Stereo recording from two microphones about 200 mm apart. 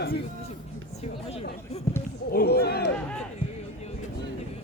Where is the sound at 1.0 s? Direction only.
30° left (ahead or behind).